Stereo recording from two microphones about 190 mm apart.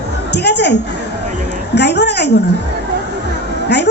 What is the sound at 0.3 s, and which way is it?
A woman's voice, 60° left (ahead or behind).